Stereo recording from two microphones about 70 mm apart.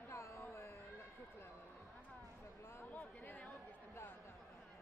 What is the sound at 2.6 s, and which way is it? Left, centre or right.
Chatter, left.